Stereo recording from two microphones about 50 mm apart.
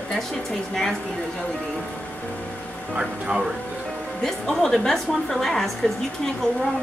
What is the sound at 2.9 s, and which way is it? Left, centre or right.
Speech, centre.